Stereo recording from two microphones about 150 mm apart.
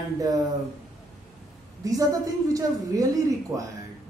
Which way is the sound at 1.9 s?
25° right (ahead or behind).